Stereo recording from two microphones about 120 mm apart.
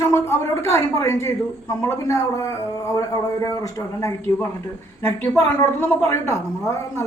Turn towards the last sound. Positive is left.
turn(degrees=25)  # may be behind; listen again after turning